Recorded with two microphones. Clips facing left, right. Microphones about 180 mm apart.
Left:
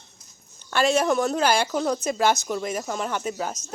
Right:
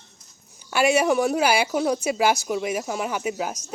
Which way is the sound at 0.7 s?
10° right (ahead or behind).